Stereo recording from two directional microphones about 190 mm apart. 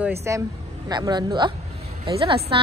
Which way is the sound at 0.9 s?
20° right (ahead or behind).